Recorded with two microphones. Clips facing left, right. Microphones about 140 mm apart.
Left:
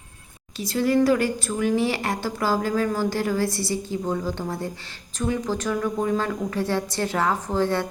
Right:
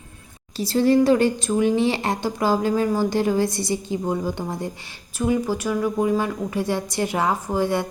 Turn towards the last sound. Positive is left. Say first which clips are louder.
# right 1 dB
turn(degrees=-15)  # may be behind; listen again after turning